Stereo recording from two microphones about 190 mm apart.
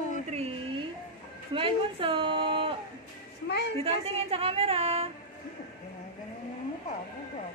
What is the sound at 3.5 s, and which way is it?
Speech, 65° left (ahead or behind).